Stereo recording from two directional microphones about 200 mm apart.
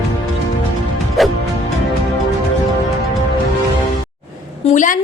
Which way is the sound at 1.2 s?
Centre (ahead or behind).